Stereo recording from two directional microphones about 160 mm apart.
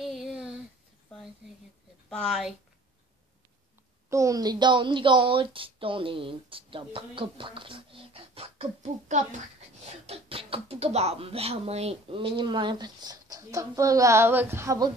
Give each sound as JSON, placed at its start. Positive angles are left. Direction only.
{"t": 0.0, "sound": "a sound", "side_deg": 0}
{"t": 2.0, "sound": "speech", "side_deg": 0}
{"t": 4.1, "sound": "a woman's voice", "side_deg": -20}